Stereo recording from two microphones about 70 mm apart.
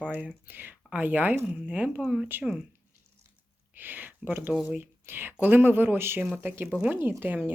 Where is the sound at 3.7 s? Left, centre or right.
Right.